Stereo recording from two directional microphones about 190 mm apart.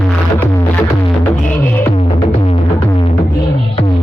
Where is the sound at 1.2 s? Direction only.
10° left (ahead or behind).